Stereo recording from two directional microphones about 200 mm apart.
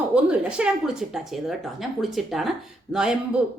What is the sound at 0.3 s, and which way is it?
A woman's voice, 5° right (ahead or behind).